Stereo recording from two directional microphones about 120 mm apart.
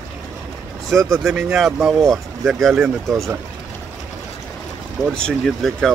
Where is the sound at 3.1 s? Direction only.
25° right (ahead or behind).